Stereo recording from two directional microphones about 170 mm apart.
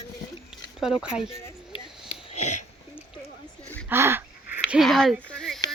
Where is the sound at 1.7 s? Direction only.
40° left (ahead or behind).